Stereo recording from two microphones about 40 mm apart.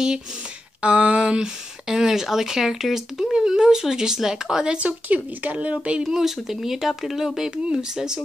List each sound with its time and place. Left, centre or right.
0.8 s speech: right; by 4.7 s centre
4.7 s speech: right
5.7 s speech: right
6.0 s speech: centre
7.4 s speech: centre